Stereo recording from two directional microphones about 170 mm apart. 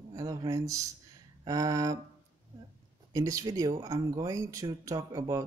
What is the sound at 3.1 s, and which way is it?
Speech, 20° right (ahead or behind).